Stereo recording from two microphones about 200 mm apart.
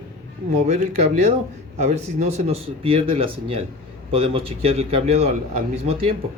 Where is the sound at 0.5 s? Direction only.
35° right (ahead or behind).